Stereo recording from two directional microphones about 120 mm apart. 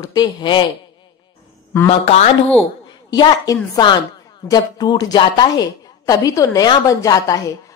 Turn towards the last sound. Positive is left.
turn(degrees=30)  # may be behind; listen again after turning